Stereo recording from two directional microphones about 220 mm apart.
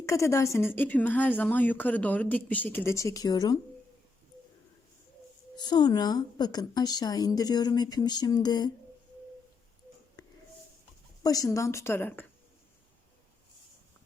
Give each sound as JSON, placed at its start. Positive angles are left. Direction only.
{"t": 0.0, "sound": "speech", "side_deg": 15}
{"t": 5.5, "sound": "speech", "side_deg": 20}
{"t": 10.2, "sound": "wheeze", "side_deg": 15}
{"t": 11.2, "sound": "speech", "side_deg": 15}